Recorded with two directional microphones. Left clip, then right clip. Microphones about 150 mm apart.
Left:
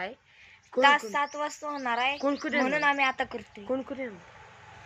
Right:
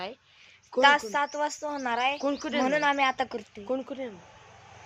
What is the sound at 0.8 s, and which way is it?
Speech, 40° right (ahead or behind).